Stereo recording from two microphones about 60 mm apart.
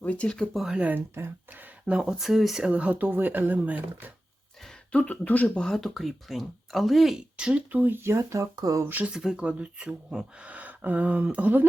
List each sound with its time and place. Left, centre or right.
0.0 s speech: left
0.5 s speech: centre
0.8 s speech: right
1.9 s speech: centre
2.6 s speech: right
4.9 s speech: left
5.5 s speech: centre
7.2 s speech: centre
7.7 s speech: right
8.8 s speech: right
9.0 s speech: centre